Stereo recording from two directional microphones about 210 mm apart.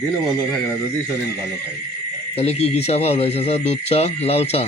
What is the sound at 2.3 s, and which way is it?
Speech, 30° left (ahead or behind).